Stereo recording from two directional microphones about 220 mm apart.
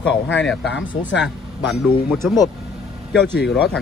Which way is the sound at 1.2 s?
Centre (ahead or behind).